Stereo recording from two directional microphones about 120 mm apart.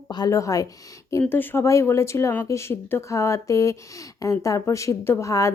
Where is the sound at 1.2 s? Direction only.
15° left (ahead or behind).